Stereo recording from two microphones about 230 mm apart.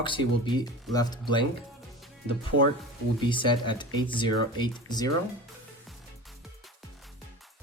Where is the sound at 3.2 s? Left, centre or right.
Left.